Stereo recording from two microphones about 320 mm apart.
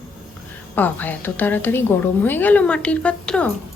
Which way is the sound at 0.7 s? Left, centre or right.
Centre.